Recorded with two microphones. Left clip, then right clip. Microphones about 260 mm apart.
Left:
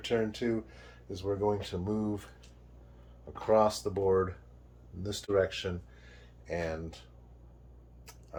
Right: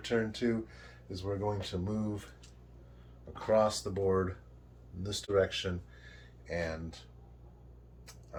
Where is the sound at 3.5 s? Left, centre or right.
Left.